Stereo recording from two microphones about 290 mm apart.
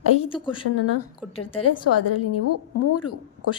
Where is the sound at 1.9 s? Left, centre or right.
Left.